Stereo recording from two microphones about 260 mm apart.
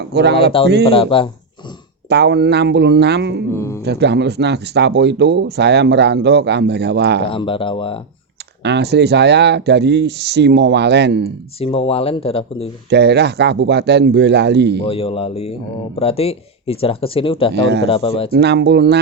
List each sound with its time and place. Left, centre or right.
0.0 s speech: right
0.5 s speech: centre
2.0 s speech: right
3.5 s a sound: centre
3.8 s speech: right
7.3 s speech: centre
8.6 s speech: right
11.6 s speech: left
12.9 s speech: right
14.8 s speech: left
17.5 s speech: right
17.8 s speech: left
18.3 s speech: right